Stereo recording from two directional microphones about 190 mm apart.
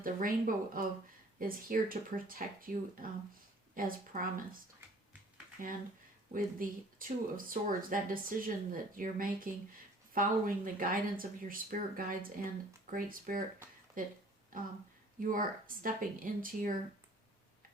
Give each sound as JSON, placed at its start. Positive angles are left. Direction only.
{"t": 0.0, "sound": "speech", "side_deg": -45}
{"t": 6.3, "sound": "speech", "side_deg": -45}